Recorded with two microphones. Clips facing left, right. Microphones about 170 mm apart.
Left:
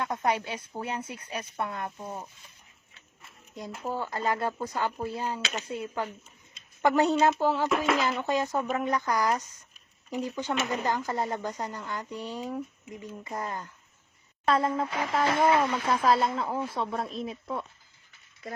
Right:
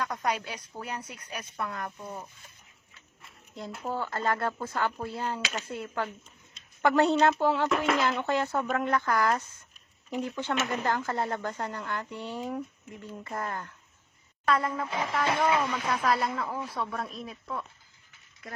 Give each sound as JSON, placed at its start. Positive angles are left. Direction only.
{"t": 0.0, "sound": "speech", "side_deg": 25}
{"t": 3.6, "sound": "speech", "side_deg": 10}
{"t": 8.3, "sound": "speech", "side_deg": 15}
{"t": 14.4, "sound": "speech", "side_deg": 30}